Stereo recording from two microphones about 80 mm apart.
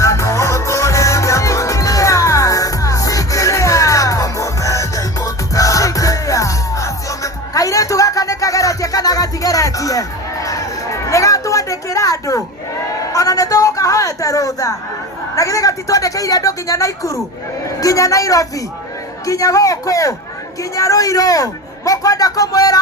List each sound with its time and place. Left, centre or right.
0.0 s music: left
13.1 s a sound: left
19.2 s a man's voice: left